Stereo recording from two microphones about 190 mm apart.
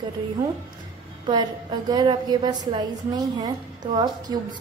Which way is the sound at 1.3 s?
25° right (ahead or behind).